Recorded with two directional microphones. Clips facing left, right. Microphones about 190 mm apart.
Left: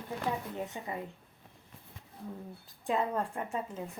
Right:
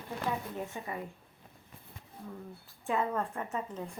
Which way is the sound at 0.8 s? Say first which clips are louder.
Even; 20° left (ahead or behind).